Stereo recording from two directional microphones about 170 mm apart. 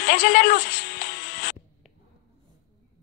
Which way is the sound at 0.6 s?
75° left (ahead or behind).